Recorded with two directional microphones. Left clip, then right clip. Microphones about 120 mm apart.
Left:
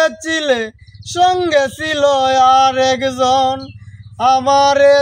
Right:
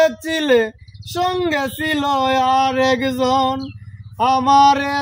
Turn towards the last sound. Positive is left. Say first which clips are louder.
# left 1 dB
turn(degrees=35)  # may be behind; listen again after turning